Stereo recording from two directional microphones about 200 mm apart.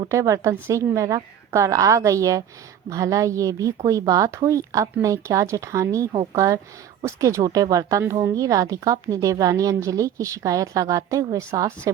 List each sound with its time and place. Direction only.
0.0 s a woman's voice: 15° right (ahead or behind)